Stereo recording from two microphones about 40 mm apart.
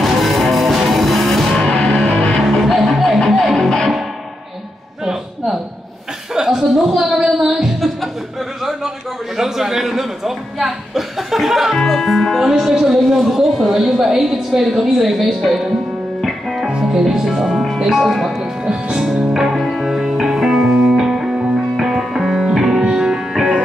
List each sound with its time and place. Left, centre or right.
0.0 s music: centre
1.6 s music: left
2.4 s music: centre
6.3 s chuckle: centre
9.4 s speech: centre
11.7 s music: centre
12.4 s a woman's voice: centre
16.2 s music: centre
16.9 s music: centre
18.0 s speech: centre
19.3 s music: centre